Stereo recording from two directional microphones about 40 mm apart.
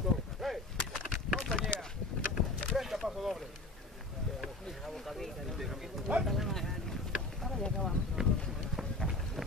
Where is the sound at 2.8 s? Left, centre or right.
Centre.